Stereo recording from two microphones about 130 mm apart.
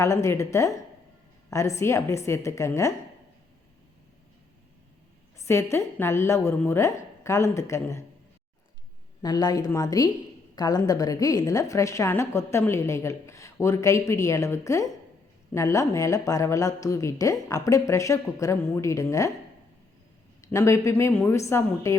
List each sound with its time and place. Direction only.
0.0 s a woman's voice: 20° left (ahead or behind)
5.5 s a woman's voice: 20° left (ahead or behind)
9.2 s a woman's voice: 30° left (ahead or behind)
20.4 s a woman's voice: 20° left (ahead or behind)